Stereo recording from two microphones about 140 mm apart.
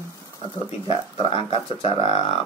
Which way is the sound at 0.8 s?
40° left (ahead or behind).